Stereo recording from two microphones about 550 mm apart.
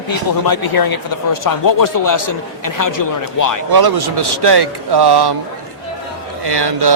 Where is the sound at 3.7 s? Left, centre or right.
Right.